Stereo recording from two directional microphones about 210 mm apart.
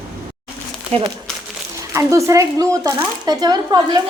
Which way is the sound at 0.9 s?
30° right (ahead or behind).